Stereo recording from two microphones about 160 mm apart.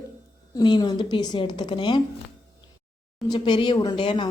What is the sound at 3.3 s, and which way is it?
A woman's voice, 30° left (ahead or behind).